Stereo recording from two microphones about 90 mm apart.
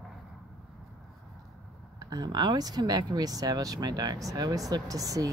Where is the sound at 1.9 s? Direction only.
45° right (ahead or behind).